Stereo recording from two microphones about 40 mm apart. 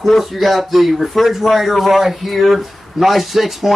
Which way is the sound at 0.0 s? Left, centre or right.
Centre.